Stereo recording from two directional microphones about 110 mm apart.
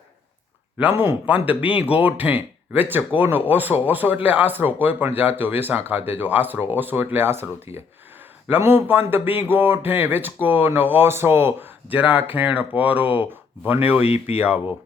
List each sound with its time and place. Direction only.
0.8 s speech: 15° right (ahead or behind)
14.0 s speech: 70° left (ahead or behind)
14.3 s speech: 15° right (ahead or behind)